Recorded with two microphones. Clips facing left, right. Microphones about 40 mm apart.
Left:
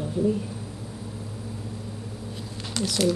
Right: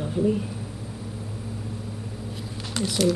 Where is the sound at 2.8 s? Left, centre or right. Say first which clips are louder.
Right 1 dB; centre.